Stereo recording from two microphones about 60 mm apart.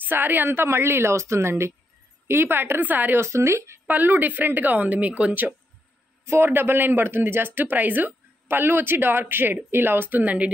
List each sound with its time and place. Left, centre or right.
0.1 s a woman's voice: right
3.2 s a woman's voice: right
3.8 s speech: right
6.2 s speech: right